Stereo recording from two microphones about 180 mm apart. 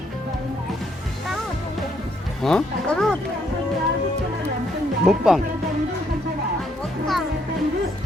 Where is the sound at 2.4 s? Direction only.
5° left (ahead or behind).